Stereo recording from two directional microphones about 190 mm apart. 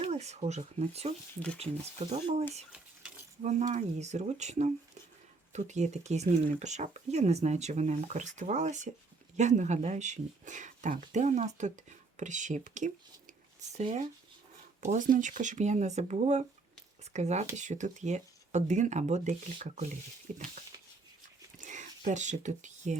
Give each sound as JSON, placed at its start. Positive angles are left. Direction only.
{"t": 0.0, "sound": "speech", "side_deg": -35}
{"t": 3.4, "sound": "speech", "side_deg": -40}
{"t": 21.7, "sound": "speech", "side_deg": -40}